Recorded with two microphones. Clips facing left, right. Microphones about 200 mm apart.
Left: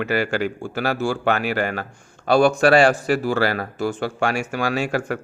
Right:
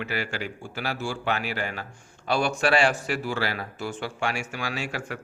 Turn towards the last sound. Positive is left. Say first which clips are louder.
# left 9 dB
turn(degrees=50)  # may be behind; listen again after turning